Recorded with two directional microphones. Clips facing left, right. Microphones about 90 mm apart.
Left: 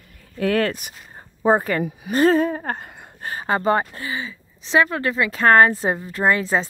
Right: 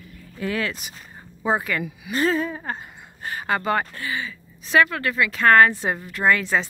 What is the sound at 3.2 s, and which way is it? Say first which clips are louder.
Speech: left 3 dB; 35° left (ahead or behind).